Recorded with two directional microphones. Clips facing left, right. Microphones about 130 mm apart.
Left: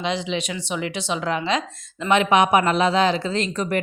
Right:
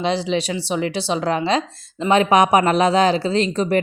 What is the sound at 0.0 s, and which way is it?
Speech, 35° right (ahead or behind).